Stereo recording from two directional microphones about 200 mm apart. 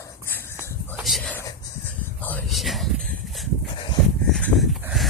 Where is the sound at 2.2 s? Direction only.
10° left (ahead or behind).